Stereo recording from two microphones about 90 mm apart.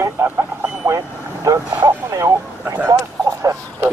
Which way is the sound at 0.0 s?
30° right (ahead or behind).